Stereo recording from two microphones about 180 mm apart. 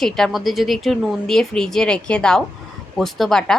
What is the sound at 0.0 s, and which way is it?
Speech, centre (ahead or behind).